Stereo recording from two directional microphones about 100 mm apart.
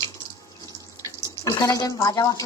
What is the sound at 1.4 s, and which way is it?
A woman's voice, 40° left (ahead or behind).